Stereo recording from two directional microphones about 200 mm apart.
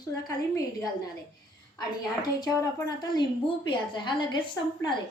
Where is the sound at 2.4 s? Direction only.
20° left (ahead or behind).